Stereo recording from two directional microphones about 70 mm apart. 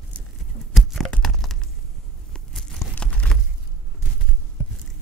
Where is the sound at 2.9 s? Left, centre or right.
Centre.